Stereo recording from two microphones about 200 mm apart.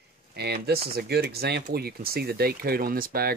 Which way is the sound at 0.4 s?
55° right (ahead or behind).